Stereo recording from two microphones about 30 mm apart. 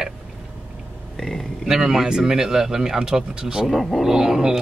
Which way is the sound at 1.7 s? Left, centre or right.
Centre.